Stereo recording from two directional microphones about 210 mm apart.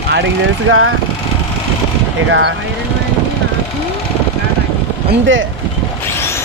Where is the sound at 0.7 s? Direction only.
75° right (ahead or behind).